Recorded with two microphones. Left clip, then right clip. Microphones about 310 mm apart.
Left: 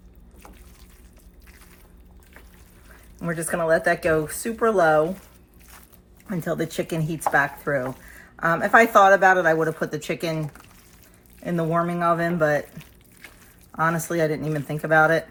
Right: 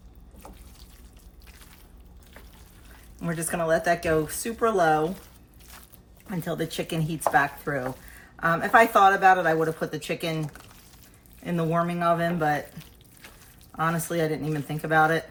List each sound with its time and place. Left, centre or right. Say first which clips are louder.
3.2 s speech: left 3 dB; centre
6.3 s speech: left 4 dB; centre
11.4 s speech: left 3 dB; centre
13.7 s speech: left 4 dB; centre